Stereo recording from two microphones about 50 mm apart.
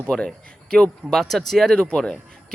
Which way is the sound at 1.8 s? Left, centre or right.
Left.